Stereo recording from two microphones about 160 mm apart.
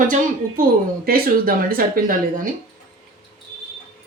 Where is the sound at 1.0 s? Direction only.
70° right (ahead or behind).